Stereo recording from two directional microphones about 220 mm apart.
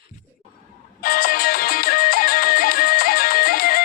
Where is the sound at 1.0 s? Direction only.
40° left (ahead or behind).